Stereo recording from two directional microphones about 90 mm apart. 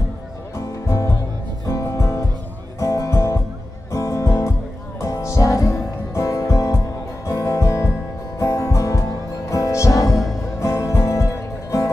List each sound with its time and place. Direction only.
0.6 s music: 35° left (ahead or behind)